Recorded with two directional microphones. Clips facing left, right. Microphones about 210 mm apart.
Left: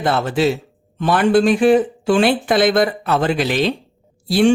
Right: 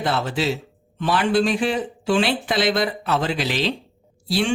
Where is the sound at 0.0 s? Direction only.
50° left (ahead or behind).